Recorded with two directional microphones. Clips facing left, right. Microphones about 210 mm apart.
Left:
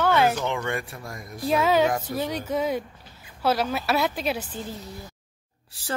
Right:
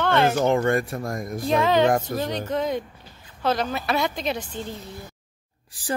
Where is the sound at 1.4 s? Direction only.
5° left (ahead or behind).